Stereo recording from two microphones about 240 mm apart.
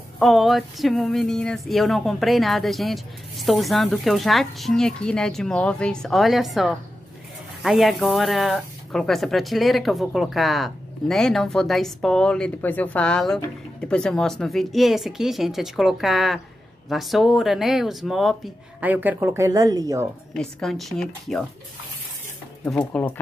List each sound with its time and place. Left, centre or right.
0.2 s speech: centre
20.3 s speech: centre
22.7 s speech: centre